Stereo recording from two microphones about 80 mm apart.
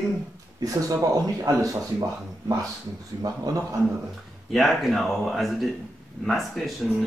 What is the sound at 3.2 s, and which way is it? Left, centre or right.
Speech, right.